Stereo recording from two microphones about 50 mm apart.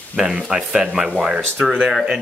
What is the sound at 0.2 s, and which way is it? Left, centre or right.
Speech, centre.